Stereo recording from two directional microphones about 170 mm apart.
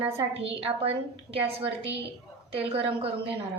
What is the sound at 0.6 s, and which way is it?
A woman's voice, 35° right (ahead or behind).